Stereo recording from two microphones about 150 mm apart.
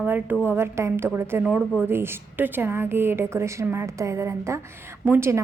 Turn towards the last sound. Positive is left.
turn(degrees=-15)  # may be behind; listen again after turning